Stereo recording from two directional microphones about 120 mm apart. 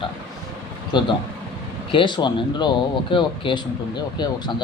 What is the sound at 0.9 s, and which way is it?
Speech, 40° left (ahead or behind).